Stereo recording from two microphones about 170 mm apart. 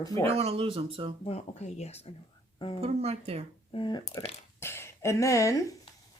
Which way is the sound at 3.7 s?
25° left (ahead or behind).